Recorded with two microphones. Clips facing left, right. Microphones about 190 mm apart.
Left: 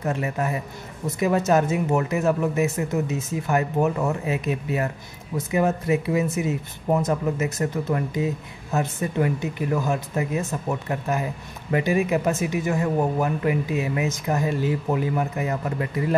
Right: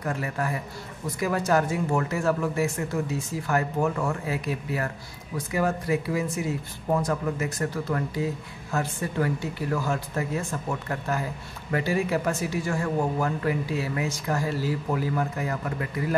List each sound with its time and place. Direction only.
0.0 s speech: 20° left (ahead or behind)